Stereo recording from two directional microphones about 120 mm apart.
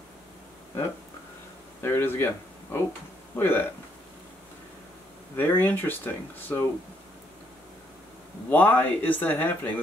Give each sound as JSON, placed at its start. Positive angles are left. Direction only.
{"t": 1.8, "sound": "speech", "side_deg": 20}
{"t": 5.3, "sound": "speech", "side_deg": 20}
{"t": 8.5, "sound": "speech", "side_deg": 15}